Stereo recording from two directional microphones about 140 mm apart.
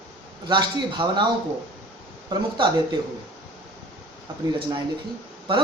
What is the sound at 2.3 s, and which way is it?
Speech, 30° right (ahead or behind).